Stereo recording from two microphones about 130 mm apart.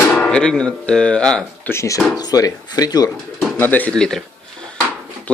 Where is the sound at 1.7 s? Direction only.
25° left (ahead or behind).